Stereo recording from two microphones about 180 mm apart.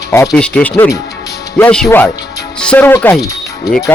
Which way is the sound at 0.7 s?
15° left (ahead or behind).